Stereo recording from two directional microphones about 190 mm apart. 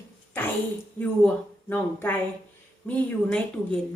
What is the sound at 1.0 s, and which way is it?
A woman's voice, 10° left (ahead or behind).